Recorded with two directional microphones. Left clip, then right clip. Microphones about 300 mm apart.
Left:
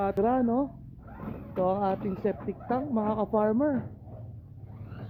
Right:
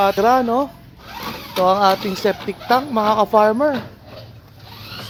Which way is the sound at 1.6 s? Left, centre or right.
Centre.